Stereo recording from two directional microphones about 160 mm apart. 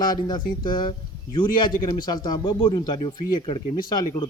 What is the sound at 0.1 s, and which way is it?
Speech, 25° left (ahead or behind).